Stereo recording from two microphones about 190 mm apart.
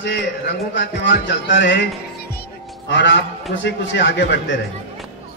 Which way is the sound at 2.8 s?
70° left (ahead or behind).